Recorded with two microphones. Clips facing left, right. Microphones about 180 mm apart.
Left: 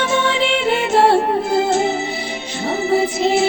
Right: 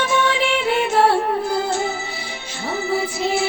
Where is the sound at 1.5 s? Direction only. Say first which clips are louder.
Left 5 dB; 20° left (ahead or behind).